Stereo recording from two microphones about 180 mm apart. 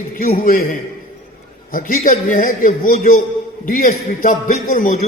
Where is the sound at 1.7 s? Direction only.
50° left (ahead or behind).